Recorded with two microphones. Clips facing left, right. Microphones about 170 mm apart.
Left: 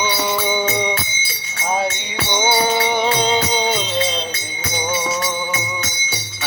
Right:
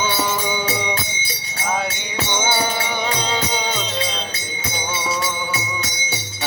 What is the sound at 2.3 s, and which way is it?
Music, 20° left (ahead or behind).